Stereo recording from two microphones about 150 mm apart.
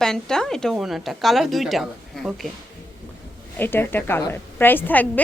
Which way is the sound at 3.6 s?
15° left (ahead or behind).